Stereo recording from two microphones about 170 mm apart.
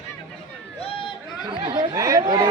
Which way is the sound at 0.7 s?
35° left (ahead or behind).